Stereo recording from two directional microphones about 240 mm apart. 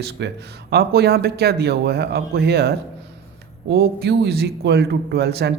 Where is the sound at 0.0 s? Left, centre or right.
Right.